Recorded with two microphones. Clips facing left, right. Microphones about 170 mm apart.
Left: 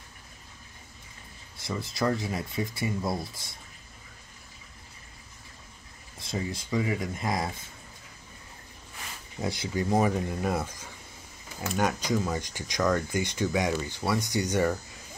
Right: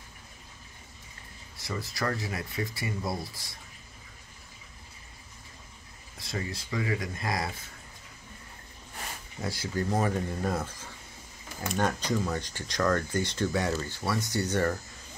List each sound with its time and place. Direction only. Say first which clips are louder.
1.6 s speech: left 3 dB; 20° left (ahead or behind)
6.1 s speech: left 3 dB; 20° left (ahead or behind)
9.4 s speech: left 2 dB; 20° left (ahead or behind)
11.7 s speech: left 1 dB; 10° left (ahead or behind)